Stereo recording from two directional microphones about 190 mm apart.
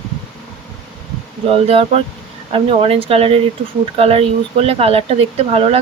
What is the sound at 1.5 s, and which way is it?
Speech, 30° right (ahead or behind).